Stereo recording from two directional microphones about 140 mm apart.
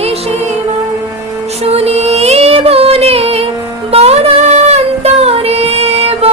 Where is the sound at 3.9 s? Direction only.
45° right (ahead or behind).